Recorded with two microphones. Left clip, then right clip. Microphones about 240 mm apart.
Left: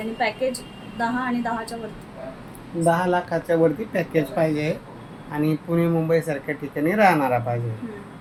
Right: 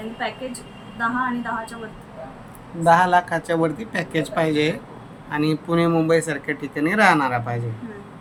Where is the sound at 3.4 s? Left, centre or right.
Right.